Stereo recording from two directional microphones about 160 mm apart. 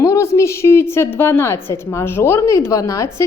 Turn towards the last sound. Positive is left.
turn(degrees=20)  # may be behind; listen again after turning